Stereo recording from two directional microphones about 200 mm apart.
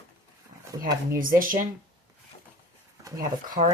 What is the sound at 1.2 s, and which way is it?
Speech, 45° right (ahead or behind).